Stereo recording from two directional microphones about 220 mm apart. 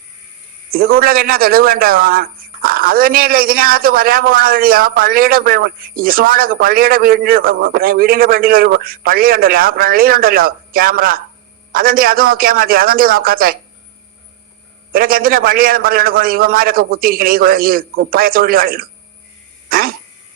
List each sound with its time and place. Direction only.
0.7 s a man's voice: 45° right (ahead or behind)
14.9 s a man's voice: 40° right (ahead or behind)